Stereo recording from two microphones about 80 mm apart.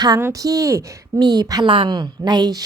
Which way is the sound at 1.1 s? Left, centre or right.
Right.